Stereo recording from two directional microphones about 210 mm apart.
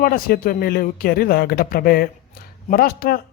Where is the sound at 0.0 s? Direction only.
45° left (ahead or behind).